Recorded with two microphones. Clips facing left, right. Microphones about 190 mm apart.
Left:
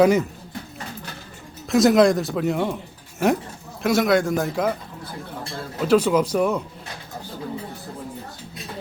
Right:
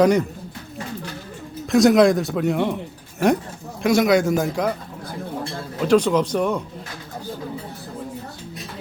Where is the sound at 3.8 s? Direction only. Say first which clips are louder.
Right 2 dB; centre (ahead or behind).